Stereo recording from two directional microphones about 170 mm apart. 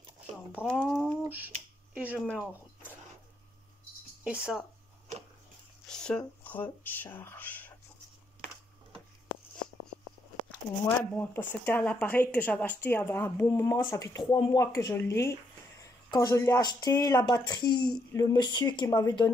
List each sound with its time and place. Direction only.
0.6 s speech: 5° left (ahead or behind)
1.2 s speech: 10° right (ahead or behind)
4.2 s speech: 5° right (ahead or behind)
5.9 s speech: 5° left (ahead or behind)
10.9 s speech: 10° left (ahead or behind)